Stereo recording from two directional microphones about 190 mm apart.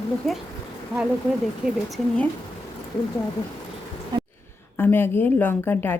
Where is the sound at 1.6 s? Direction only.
Centre (ahead or behind).